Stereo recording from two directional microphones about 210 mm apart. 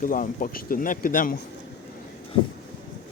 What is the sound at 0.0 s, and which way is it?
Speech, 40° left (ahead or behind).